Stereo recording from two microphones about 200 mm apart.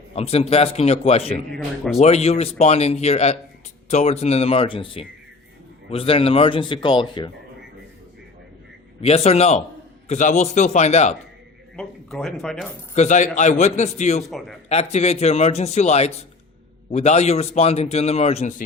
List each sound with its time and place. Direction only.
0.1 s a man's voice: 30° left (ahead or behind)
1.5 s speech: centre (ahead or behind)
2.0 s a man's voice: 30° left (ahead or behind)
9.0 s a man's voice: 30° left (ahead or behind)
11.8 s speech: centre (ahead or behind)
12.9 s a man's voice: 35° left (ahead or behind)
14.3 s speech: centre (ahead or behind)
14.7 s a man's voice: 35° left (ahead or behind)